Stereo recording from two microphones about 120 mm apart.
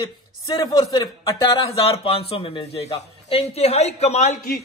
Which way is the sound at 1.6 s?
55° left (ahead or behind).